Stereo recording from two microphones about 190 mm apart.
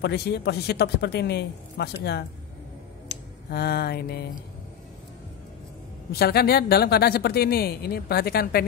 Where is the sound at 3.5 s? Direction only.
55° left (ahead or behind).